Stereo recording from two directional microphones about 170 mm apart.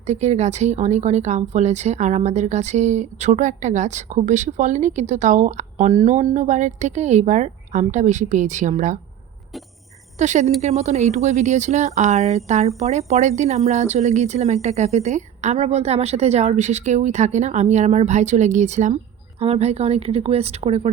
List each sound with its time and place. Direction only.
0.0 s speech: 40° right (ahead or behind)
10.2 s speech: 45° right (ahead or behind)